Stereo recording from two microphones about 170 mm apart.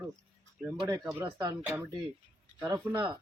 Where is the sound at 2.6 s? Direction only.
20° right (ahead or behind).